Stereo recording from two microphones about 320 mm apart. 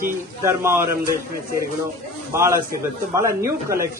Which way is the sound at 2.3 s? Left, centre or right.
Centre.